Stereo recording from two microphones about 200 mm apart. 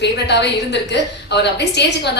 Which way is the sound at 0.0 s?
60° left (ahead or behind).